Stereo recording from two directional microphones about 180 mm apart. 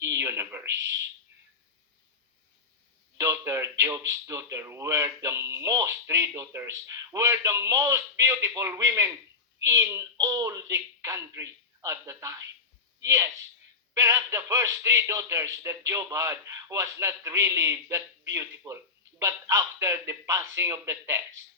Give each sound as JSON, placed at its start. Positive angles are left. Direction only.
{"t": 0.0, "sound": "speech", "side_deg": -15}
{"t": 3.2, "sound": "speech", "side_deg": -15}